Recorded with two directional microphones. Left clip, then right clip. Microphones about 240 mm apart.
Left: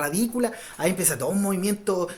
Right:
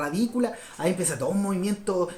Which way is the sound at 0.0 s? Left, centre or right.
Left.